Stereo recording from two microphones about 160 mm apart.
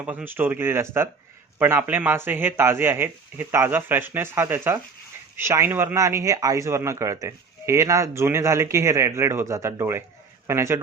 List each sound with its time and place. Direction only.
0.0 s a man's voice: 10° right (ahead or behind)